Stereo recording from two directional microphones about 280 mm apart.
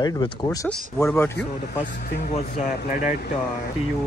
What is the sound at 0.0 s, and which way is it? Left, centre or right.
Speech, centre.